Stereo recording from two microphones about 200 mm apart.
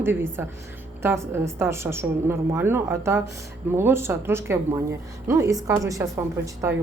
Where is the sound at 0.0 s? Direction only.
10° right (ahead or behind).